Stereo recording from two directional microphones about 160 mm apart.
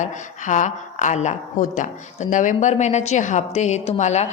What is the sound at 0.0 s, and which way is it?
A woman's voice, 50° left (ahead or behind).